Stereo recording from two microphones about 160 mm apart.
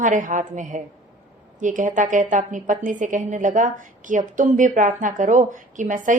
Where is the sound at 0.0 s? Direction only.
55° right (ahead or behind).